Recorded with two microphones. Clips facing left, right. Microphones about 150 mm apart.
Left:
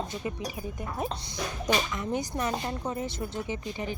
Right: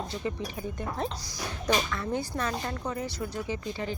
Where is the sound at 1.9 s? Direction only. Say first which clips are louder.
Even; 15° left (ahead or behind).